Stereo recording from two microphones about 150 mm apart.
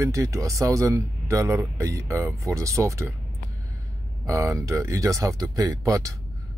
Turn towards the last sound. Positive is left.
turn(degrees=-20)  # may be behind; listen again after turning